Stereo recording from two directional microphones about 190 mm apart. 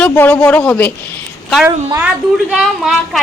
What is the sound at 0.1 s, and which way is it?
Speech, 10° left (ahead or behind).